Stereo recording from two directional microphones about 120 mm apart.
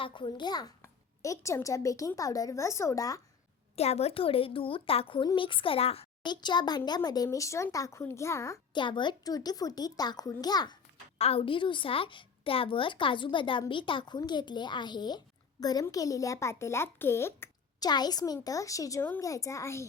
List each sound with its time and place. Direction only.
0.0 s a child's voice: 40° left (ahead or behind)
3.8 s a woman's voice: 60° left (ahead or behind)
6.2 s speech: 40° left (ahead or behind)
8.7 s a child's voice: 40° left (ahead or behind)
11.2 s a woman's voice: 50° left (ahead or behind); by 17.5 s 20° left (ahead or behind)
17.7 s a child's voice: 35° left (ahead or behind)